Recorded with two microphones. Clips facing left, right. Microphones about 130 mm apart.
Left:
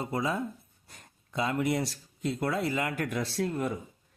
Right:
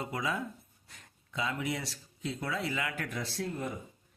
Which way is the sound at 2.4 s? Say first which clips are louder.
Left 5 dB; 45° left (ahead or behind).